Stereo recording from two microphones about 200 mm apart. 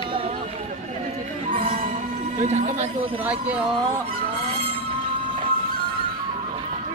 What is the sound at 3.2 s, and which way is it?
Speech, 5° right (ahead or behind).